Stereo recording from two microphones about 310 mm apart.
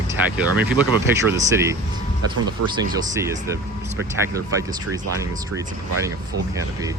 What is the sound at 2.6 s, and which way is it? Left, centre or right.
Speech, right.